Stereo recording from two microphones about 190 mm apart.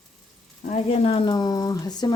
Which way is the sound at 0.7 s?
30° left (ahead or behind).